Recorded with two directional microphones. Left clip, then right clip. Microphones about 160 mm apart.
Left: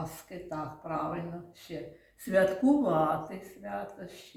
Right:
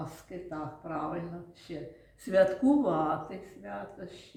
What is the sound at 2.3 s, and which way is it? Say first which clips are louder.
Speech: right 1 dB; 30° left (ahead or behind).